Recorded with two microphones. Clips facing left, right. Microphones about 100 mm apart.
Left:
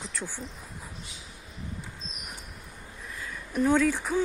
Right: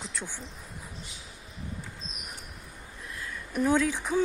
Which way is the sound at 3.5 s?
5° right (ahead or behind).